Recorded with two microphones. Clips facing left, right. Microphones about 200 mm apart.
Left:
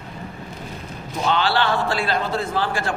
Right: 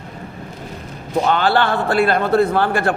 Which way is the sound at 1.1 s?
50° right (ahead or behind).